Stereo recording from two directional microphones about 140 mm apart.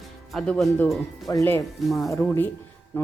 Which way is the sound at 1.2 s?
20° left (ahead or behind).